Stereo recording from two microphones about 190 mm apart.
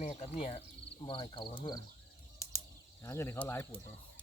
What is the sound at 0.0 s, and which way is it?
Speech, 35° left (ahead or behind).